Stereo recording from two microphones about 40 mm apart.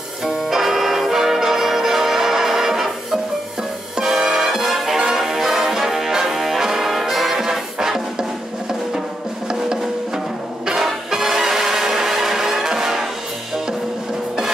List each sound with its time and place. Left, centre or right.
0.2 s music: centre
9.5 s percussion: centre
10.7 s music: centre